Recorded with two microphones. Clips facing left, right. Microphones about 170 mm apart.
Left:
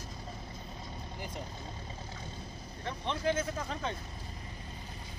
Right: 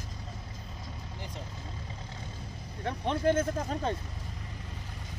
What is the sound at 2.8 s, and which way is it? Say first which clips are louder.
Vehicle: right 5 dB; 50° right (ahead or behind).